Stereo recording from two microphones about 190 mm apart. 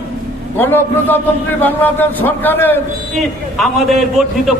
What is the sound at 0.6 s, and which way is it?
A man's voice, 10° left (ahead or behind).